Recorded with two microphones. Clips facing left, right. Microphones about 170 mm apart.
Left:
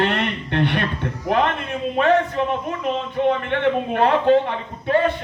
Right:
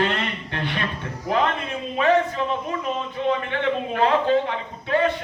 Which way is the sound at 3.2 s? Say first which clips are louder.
Left 3 dB; 60° left (ahead or behind).